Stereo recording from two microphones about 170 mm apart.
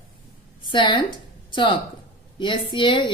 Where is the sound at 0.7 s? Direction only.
25° left (ahead or behind).